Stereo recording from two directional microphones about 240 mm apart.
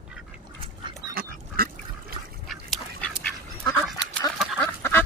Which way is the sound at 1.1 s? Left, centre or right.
Right.